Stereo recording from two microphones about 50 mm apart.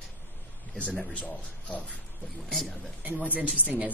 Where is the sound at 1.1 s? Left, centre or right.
Left.